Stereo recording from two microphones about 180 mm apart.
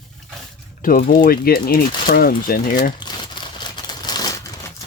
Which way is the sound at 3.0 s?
25° left (ahead or behind).